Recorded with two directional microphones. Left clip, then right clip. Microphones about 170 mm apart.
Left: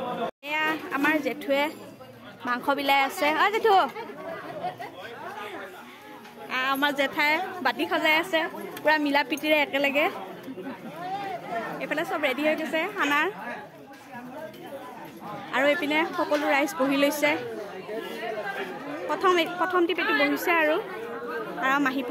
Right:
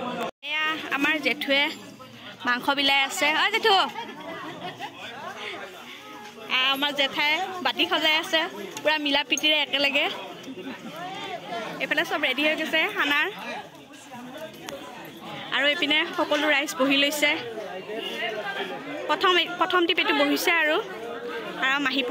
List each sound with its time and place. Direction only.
0.5 s a woman's voice: 5° left (ahead or behind)
6.5 s a woman's voice: 25° left (ahead or behind)
11.8 s a woman's voice: 10° left (ahead or behind)
15.5 s a woman's voice: 10° left (ahead or behind)
19.0 s a woman's voice: 5° left (ahead or behind)
21.5 s a woman's voice: 15° left (ahead or behind)